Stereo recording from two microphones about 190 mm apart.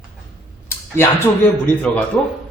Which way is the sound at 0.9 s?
10° left (ahead or behind).